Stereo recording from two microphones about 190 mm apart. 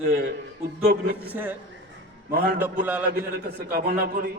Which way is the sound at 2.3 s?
55° right (ahead or behind).